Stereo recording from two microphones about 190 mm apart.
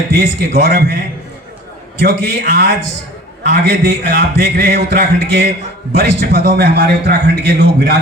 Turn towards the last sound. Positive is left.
turn(degrees=-60)  # may be behind; listen again after turning